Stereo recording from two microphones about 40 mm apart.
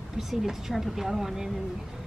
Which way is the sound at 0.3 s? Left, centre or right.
Centre.